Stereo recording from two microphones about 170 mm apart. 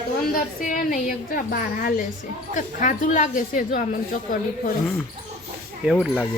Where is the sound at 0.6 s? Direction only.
55° left (ahead or behind).